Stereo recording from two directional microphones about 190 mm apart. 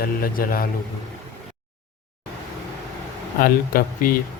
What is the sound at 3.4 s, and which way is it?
Speech, 50° left (ahead or behind).